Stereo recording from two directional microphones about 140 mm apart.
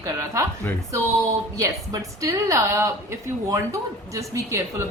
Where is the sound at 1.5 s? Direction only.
20° right (ahead or behind).